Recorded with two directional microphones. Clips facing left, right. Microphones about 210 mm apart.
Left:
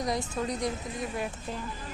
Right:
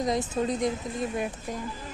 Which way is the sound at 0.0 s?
20° right (ahead or behind).